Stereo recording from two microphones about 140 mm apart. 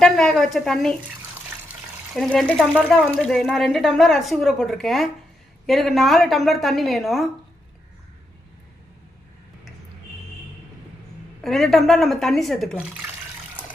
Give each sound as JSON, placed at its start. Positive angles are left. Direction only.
{"t": 0.0, "sound": "speech", "side_deg": 5}
{"t": 2.1, "sound": "speech", "side_deg": 0}
{"t": 11.4, "sound": "speech", "side_deg": 0}